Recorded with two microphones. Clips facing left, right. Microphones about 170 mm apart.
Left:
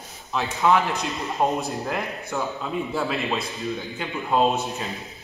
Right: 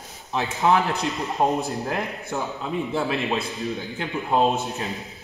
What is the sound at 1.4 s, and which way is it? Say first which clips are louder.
A man's voice: right 1 dB; 20° right (ahead or behind).